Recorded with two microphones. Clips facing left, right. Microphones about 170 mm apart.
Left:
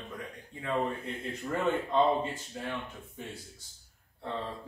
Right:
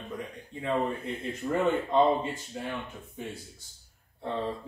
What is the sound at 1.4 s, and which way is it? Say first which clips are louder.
Speech: right 4 dB; 15° right (ahead or behind).